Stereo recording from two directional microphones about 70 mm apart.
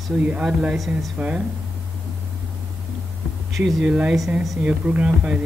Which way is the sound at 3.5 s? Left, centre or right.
Centre.